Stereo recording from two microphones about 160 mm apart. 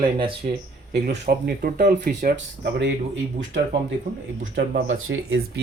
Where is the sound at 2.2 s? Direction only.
90° right.